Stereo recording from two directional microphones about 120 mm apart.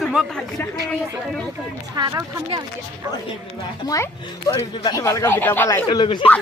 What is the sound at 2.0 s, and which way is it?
Music, 30° right (ahead or behind).